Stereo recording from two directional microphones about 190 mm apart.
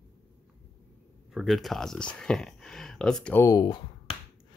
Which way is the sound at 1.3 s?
Centre (ahead or behind).